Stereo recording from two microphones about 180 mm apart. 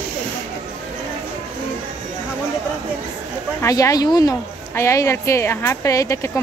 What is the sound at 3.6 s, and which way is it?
A woman's voice, 15° left (ahead or behind).